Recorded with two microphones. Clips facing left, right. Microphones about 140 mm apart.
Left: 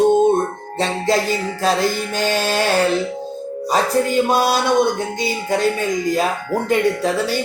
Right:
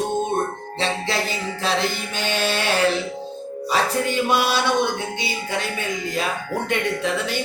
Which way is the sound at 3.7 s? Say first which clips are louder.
Left 5 dB; 40° left (ahead or behind).